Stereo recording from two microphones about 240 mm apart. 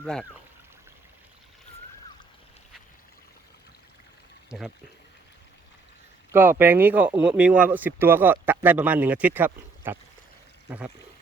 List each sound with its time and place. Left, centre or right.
0.0 s speech: centre
4.4 s speech: centre
6.3 s speech: centre